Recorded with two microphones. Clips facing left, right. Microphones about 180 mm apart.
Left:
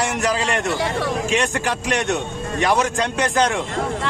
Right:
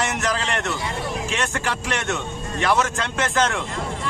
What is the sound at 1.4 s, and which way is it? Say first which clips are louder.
A man's voice: left 3 dB; 15° left (ahead or behind).